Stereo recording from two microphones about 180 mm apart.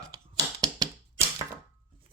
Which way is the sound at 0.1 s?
20° right (ahead or behind).